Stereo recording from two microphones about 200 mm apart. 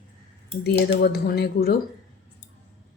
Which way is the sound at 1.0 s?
50° left (ahead or behind).